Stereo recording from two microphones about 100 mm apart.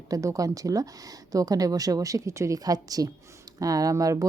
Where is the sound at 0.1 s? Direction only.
35° right (ahead or behind).